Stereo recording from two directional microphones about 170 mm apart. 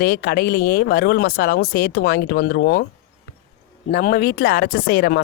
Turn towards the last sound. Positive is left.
turn(degrees=70)  # may be behind; listen again after turning